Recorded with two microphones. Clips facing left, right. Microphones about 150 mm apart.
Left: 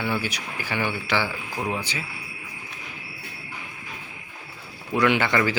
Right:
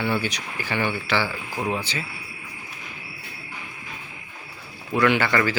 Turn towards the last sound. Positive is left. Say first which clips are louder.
# even
turn(degrees=20)  # may be behind; listen again after turning